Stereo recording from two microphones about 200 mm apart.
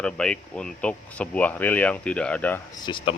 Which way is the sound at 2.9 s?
20° left (ahead or behind).